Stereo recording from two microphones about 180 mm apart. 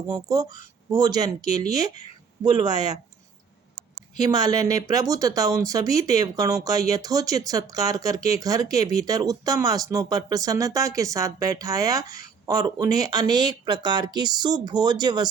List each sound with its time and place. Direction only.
0.1 s speech: 20° right (ahead or behind)
4.2 s speech: 20° right (ahead or behind)